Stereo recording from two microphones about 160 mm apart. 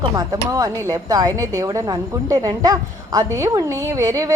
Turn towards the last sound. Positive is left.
turn(degrees=-20)  # may be behind; listen again after turning